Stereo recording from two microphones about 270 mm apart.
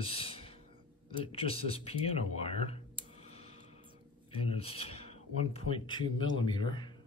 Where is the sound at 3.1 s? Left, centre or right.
Left.